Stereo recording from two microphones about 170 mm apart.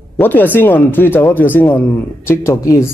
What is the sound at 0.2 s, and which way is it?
Speech, 10° left (ahead or behind).